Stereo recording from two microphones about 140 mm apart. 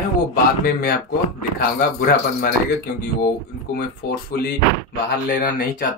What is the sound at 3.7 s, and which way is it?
Speech, 90° left.